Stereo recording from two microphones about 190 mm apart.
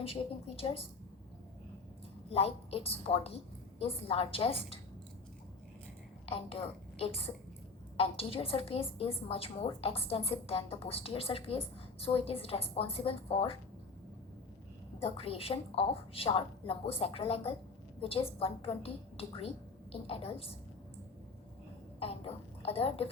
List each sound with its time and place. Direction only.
0.0 s a woman's voice: 30° left (ahead or behind)
2.3 s a woman's voice: 30° left (ahead or behind)
6.2 s a woman's voice: 30° left (ahead or behind)
15.0 s a woman's voice: 30° left (ahead or behind)
22.0 s a woman's voice: 30° left (ahead or behind)